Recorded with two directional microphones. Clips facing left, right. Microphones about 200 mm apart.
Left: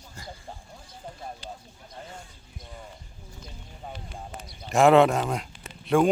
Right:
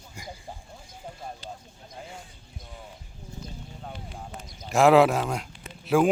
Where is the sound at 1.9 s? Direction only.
10° right (ahead or behind).